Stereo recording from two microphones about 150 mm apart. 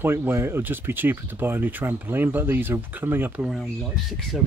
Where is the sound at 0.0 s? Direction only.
15° right (ahead or behind).